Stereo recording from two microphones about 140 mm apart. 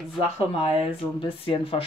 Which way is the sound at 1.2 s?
40° left (ahead or behind).